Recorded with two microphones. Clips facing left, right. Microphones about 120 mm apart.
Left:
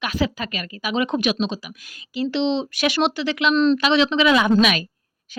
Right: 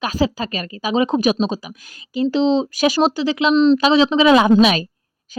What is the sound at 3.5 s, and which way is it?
A woman's voice, 25° right (ahead or behind).